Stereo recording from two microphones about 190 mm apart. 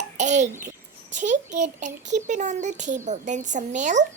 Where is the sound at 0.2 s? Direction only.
40° right (ahead or behind).